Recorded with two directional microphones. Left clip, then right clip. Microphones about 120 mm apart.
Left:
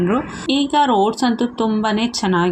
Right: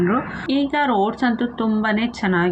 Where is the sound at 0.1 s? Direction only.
30° left (ahead or behind).